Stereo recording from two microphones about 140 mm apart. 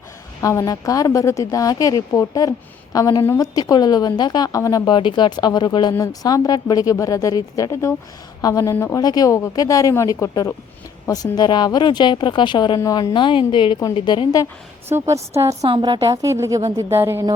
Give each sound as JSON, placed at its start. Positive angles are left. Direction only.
{"t": 0.4, "sound": "a woman's voice", "side_deg": 25}
{"t": 14.8, "sound": "a woman's voice", "side_deg": -20}
{"t": 15.7, "sound": "a woman's voice", "side_deg": -35}